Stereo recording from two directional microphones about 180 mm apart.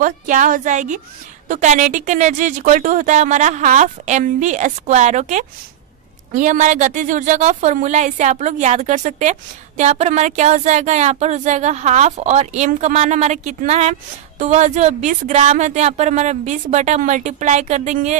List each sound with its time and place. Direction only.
0.0 s speech: 45° right (ahead or behind)